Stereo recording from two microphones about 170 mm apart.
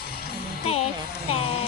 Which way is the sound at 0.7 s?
35° left (ahead or behind).